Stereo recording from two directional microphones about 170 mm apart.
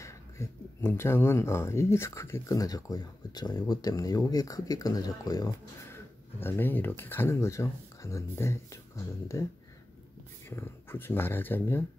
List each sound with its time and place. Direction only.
0.0 s speech: 15° left (ahead or behind)
10.5 s speech: 15° left (ahead or behind)